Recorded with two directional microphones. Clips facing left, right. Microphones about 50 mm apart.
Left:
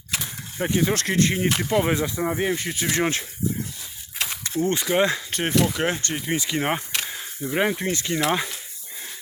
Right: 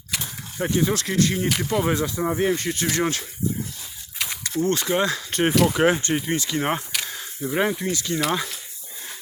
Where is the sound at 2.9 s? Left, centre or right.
Left.